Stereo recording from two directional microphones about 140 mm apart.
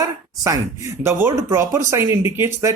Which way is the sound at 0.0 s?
25° right (ahead or behind).